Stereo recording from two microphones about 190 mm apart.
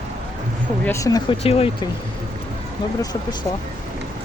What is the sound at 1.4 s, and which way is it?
Speech, 30° left (ahead or behind).